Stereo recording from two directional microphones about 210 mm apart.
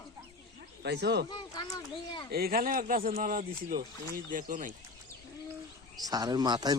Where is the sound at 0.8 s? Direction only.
55° right (ahead or behind).